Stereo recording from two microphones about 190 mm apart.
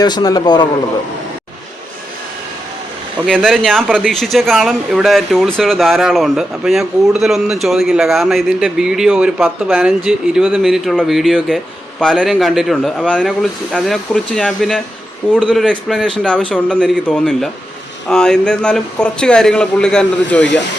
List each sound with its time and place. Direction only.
0.0 s speech: 20° left (ahead or behind)
3.2 s speech: 5° left (ahead or behind)